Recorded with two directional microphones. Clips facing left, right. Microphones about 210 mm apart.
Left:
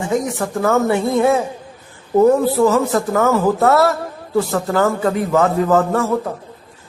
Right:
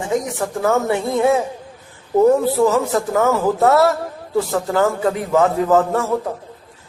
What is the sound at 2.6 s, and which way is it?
A man's voice, 15° right (ahead or behind).